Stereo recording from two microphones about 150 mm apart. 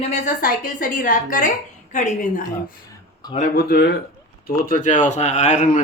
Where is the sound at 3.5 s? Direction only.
90° left.